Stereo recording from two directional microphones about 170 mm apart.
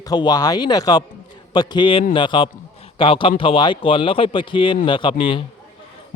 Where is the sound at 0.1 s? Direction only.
25° left (ahead or behind).